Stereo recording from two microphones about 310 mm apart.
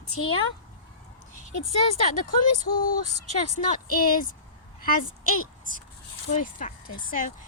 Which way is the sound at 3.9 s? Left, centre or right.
Left.